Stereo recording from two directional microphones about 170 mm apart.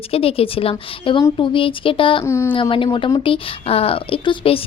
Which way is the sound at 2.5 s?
30° left (ahead or behind).